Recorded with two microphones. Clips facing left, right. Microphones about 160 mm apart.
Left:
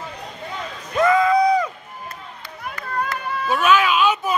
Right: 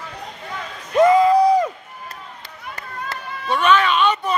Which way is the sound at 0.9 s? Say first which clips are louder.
Right 4 dB; 25° right (ahead or behind).